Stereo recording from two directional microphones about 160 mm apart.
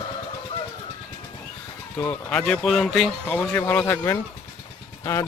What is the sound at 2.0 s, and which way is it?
Speech, 10° left (ahead or behind).